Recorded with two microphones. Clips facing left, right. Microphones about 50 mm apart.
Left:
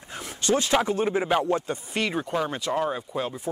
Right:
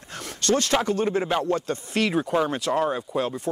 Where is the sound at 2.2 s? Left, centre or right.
Centre.